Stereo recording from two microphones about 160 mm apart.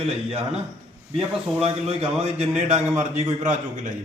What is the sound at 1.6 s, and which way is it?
A man's voice, 40° right (ahead or behind).